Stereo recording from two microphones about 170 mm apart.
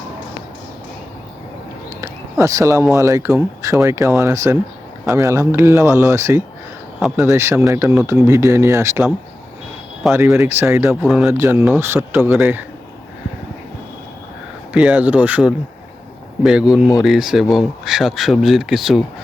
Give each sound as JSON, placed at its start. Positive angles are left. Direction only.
{"t": 2.0, "sound": "a sound", "side_deg": -20}
{"t": 2.8, "sound": "speech", "side_deg": -15}
{"t": 14.7, "sound": "speech", "side_deg": -5}